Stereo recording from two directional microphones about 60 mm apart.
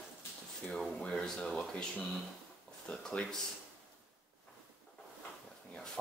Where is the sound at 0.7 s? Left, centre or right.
Centre.